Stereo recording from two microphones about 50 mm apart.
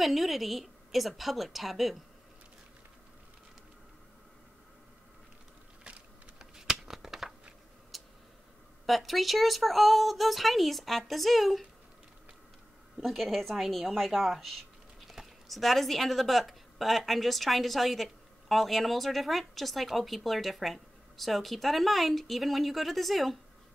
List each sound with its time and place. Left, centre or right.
0.0 s a woman's voice: centre
5.9 s a sound: centre
7.9 s tick-tock: centre
8.8 s a woman's voice: centre
13.0 s a woman's voice: centre